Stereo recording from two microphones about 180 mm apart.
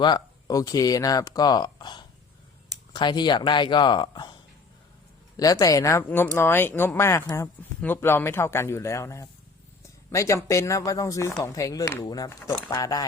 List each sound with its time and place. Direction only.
0.0 s speech: 20° left (ahead or behind)
5.4 s speech: 20° left (ahead or behind)